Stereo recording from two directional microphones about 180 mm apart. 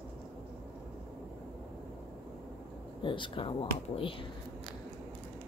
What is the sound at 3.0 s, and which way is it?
Speech, 25° left (ahead or behind).